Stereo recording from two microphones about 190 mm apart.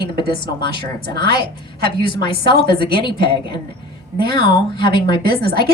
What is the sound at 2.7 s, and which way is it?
Speech, 25° left (ahead or behind).